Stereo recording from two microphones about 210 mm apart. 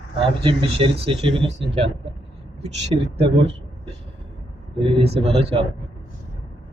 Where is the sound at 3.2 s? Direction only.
25° right (ahead or behind).